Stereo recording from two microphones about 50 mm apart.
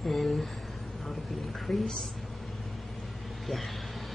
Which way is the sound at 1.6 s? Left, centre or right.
Centre.